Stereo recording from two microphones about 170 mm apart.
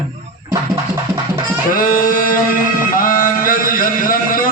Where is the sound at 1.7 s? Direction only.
55° left (ahead or behind).